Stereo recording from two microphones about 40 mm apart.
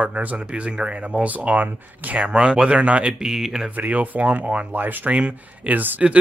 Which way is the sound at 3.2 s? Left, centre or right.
Centre.